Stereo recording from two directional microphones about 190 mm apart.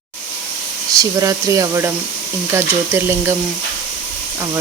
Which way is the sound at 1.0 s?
20° right (ahead or behind).